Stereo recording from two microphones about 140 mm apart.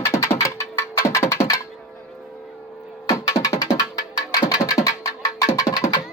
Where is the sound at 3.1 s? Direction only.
25° left (ahead or behind).